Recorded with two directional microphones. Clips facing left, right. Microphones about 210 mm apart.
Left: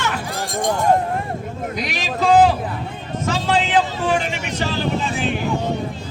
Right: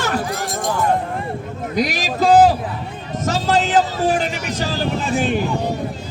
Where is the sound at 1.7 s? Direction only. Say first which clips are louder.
Right 7 dB; 40° right (ahead or behind).